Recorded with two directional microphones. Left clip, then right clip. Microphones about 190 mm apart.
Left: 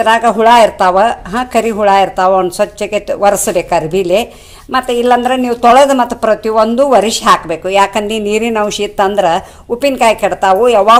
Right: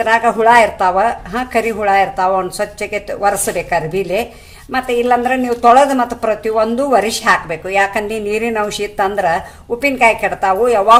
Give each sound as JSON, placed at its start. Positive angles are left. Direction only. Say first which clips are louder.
{"t": 0.0, "sound": "speech", "louder": "left 3 dB", "side_deg": 25}